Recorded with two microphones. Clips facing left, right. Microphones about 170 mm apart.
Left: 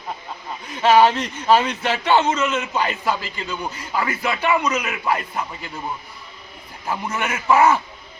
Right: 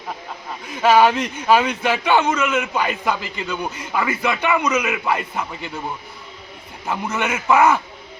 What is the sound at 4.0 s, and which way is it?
Speech, centre (ahead or behind).